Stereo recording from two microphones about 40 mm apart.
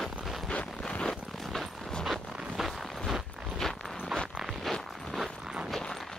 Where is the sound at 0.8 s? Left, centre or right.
Left.